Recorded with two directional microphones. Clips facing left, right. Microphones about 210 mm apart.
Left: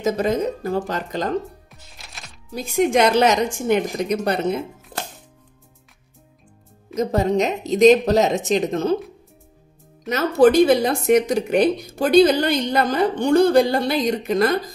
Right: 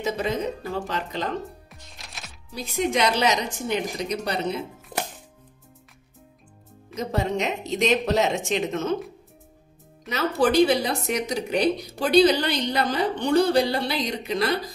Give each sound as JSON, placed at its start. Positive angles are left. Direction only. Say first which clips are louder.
{"t": 0.0, "sound": "a woman's voice", "louder": "left 6 dB", "side_deg": 45}
{"t": 1.7, "sound": "music", "louder": "even", "side_deg": 0}
{"t": 2.5, "sound": "a woman's voice", "louder": "left 7 dB", "side_deg": 50}
{"t": 4.9, "sound": "music", "louder": "right 2 dB", "side_deg": -20}
{"t": 7.0, "sound": "a woman's voice", "louder": "left 7 dB", "side_deg": 40}
{"t": 10.0, "sound": "a woman's voice", "louder": "left 8 dB", "side_deg": 45}